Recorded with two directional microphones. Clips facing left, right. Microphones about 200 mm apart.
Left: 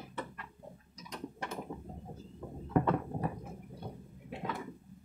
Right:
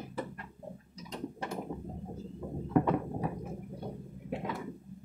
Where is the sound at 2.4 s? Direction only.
10° right (ahead or behind).